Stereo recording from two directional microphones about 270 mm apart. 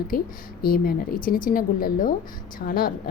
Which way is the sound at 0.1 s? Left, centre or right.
Left.